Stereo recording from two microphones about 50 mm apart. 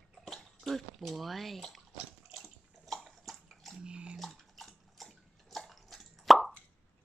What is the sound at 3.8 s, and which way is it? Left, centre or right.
Bathtub, centre.